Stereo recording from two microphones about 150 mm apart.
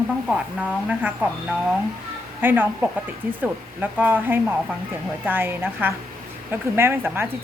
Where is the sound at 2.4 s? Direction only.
15° right (ahead or behind).